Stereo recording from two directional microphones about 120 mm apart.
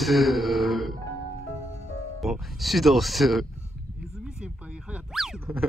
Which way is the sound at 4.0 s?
5° right (ahead or behind).